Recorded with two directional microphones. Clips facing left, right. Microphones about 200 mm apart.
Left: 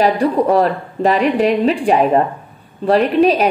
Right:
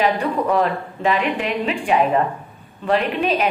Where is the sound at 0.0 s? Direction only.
35° left (ahead or behind).